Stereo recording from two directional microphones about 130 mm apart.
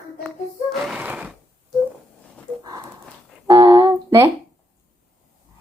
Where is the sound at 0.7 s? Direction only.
5° right (ahead or behind).